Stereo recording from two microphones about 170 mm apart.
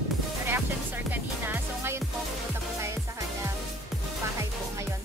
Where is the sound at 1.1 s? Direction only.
10° right (ahead or behind).